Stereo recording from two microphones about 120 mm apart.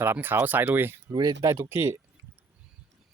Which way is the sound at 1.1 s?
35° right (ahead or behind).